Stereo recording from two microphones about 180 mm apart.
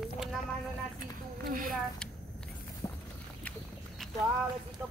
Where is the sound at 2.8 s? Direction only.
15° left (ahead or behind).